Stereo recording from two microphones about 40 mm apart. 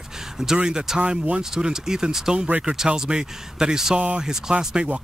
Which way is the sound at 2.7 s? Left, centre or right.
Right.